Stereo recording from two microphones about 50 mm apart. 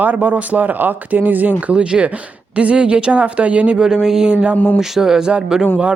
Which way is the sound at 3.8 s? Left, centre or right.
Centre.